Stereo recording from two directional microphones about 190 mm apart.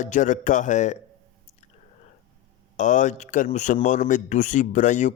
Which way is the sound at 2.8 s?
40° left (ahead or behind).